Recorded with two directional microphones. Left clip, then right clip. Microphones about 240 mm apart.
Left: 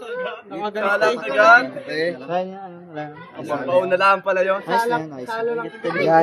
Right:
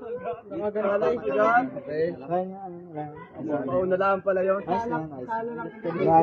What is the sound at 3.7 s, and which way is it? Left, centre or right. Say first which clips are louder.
A man's voice: left 8 dB; left.